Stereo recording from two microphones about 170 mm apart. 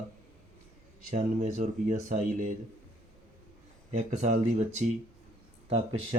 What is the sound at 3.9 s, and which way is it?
Speech, 45° right (ahead or behind).